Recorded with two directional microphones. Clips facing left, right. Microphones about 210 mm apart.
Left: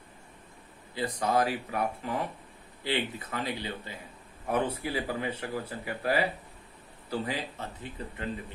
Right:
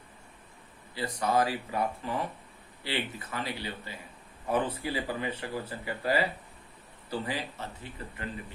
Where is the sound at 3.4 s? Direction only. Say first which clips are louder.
Left 2 dB; 20° left (ahead or behind).